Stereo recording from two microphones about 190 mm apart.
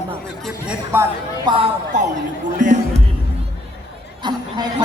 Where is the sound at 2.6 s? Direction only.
40° right (ahead or behind).